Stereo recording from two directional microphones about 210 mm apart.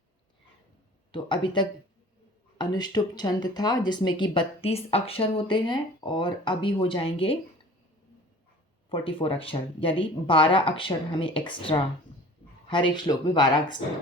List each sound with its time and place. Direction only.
1.1 s speech: 25° left (ahead or behind)
8.9 s speech: 25° left (ahead or behind)